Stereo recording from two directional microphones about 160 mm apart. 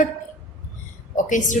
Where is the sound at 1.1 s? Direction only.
50° left (ahead or behind).